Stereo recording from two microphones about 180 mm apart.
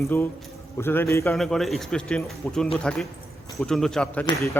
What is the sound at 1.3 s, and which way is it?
A man's voice, centre (ahead or behind).